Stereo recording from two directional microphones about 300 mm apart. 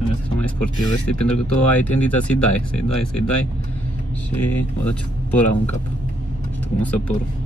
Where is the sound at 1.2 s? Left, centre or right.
Centre.